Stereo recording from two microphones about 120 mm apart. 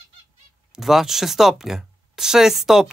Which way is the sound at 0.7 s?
Centre (ahead or behind).